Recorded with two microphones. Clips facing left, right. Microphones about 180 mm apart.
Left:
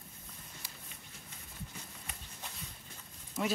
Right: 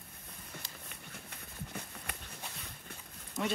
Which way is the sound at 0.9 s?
60° right (ahead or behind).